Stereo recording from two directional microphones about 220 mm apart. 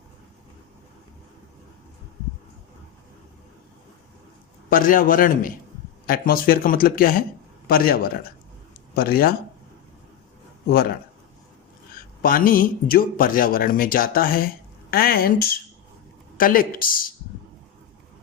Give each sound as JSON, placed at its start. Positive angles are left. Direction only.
{"t": 4.7, "sound": "speech", "side_deg": 40}
{"t": 10.7, "sound": "speech", "side_deg": 45}
{"t": 12.2, "sound": "speech", "side_deg": 40}